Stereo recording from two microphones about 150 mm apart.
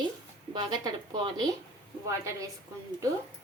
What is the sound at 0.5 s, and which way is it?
Speech, 25° right (ahead or behind).